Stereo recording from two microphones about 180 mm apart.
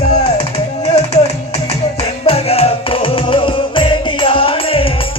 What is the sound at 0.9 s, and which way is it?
Music, 35° left (ahead or behind).